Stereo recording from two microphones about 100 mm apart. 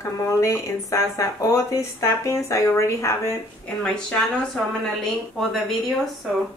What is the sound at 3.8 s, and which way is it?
A woman's voice, 10° left (ahead or behind).